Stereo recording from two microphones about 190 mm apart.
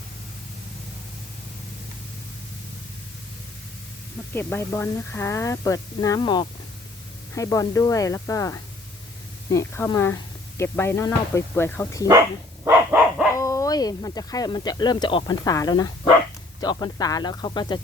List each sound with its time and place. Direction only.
4.4 s speech: 10° left (ahead or behind)
12.6 s dog: 10° right (ahead or behind)
13.3 s speech: 15° left (ahead or behind)